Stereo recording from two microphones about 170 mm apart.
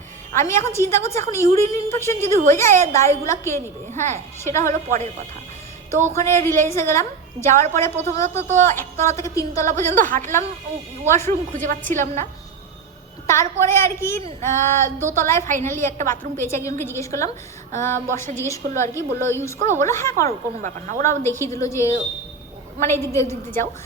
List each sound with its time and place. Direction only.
0.3 s a woman's voice: 15° left (ahead or behind)
6.1 s a woman's voice: 15° left (ahead or behind)
10.0 s speech: 50° right (ahead or behind)
11.0 s a woman's voice: 15° left (ahead or behind)
11.5 s speech: 50° right (ahead or behind)
13.2 s a woman's voice: 15° left (ahead or behind)